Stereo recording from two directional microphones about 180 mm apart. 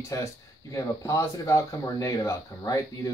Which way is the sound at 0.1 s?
15° left (ahead or behind).